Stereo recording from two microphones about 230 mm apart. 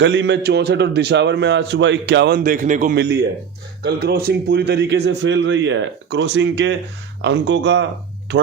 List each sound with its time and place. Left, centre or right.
0.0 s a man's voice: right
2.9 s a man's voice: right